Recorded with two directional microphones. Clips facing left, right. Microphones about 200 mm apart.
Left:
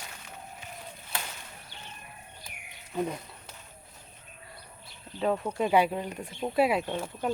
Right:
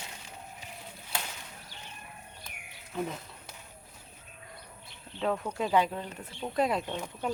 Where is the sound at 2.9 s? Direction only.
10° left (ahead or behind).